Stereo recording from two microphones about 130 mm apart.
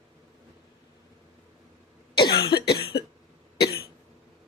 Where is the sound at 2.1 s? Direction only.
40° left (ahead or behind).